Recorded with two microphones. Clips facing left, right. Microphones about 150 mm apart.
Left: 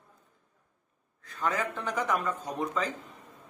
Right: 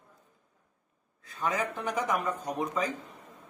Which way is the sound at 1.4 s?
15° right (ahead or behind).